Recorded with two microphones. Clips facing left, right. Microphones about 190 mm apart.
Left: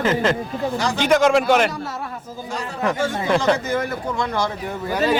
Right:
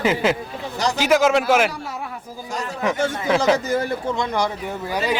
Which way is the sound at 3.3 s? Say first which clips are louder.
Even; centre (ahead or behind).